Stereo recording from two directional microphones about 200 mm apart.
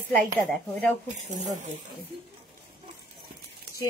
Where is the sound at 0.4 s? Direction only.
5° left (ahead or behind).